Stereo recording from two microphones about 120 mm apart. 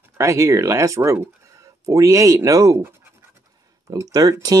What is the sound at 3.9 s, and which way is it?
Speech, 30° right (ahead or behind).